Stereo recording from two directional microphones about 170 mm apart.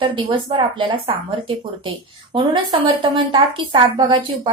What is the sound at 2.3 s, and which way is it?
A woman's voice, 30° right (ahead or behind).